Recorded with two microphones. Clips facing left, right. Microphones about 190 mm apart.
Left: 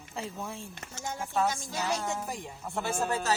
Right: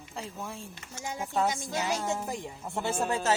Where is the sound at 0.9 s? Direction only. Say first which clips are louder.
Right 1 dB; 15° right (ahead or behind).